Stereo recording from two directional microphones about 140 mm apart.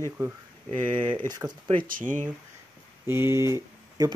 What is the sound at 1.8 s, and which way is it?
Speech, 75° right (ahead or behind).